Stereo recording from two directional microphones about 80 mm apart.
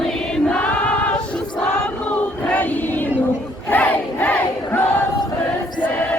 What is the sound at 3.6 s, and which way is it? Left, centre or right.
Crowd, left.